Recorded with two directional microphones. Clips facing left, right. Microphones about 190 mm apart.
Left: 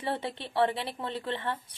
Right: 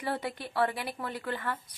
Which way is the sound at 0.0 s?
25° left (ahead or behind).